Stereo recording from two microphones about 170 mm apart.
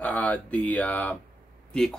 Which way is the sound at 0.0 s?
10° left (ahead or behind).